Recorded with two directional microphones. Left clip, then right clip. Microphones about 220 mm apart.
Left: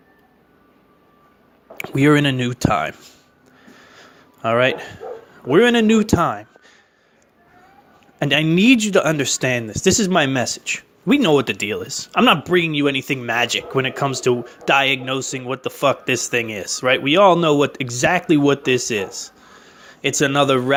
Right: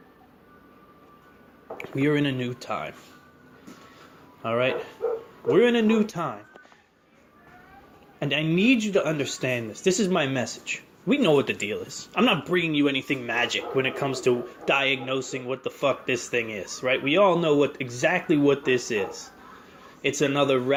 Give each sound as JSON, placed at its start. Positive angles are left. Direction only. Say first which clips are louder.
{"t": 1.8, "sound": "speech", "louder": "left 9 dB", "side_deg": 50}
{"t": 4.4, "sound": "speech", "louder": "left 8 dB", "side_deg": 50}
{"t": 8.2, "sound": "a man's voice", "louder": "left 7 dB", "side_deg": 50}